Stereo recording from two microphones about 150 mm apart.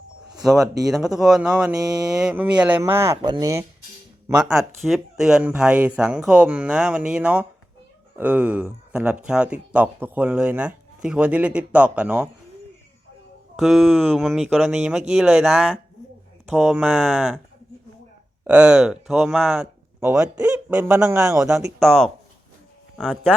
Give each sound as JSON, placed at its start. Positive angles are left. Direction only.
{"t": 0.4, "sound": "speech", "side_deg": 0}
{"t": 3.2, "sound": "speech", "side_deg": -30}
{"t": 4.4, "sound": "speech", "side_deg": -5}
{"t": 13.6, "sound": "speech", "side_deg": 0}
{"t": 18.4, "sound": "speech", "side_deg": -10}
{"t": 21.4, "sound": "speech", "side_deg": 0}